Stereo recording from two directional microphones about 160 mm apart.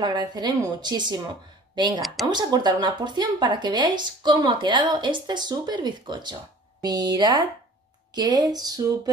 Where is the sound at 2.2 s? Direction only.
25° right (ahead or behind).